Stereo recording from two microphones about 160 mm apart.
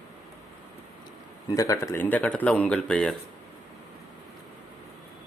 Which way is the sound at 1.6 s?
20° left (ahead or behind).